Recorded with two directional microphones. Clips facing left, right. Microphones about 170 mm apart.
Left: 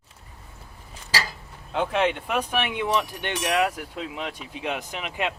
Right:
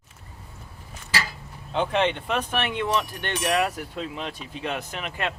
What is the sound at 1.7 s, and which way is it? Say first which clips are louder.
Speech: even; 5° left (ahead or behind).